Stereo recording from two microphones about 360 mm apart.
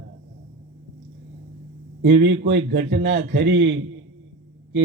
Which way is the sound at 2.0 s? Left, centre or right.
Right.